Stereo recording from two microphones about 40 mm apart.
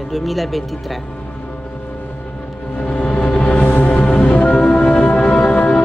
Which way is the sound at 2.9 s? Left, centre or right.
Left.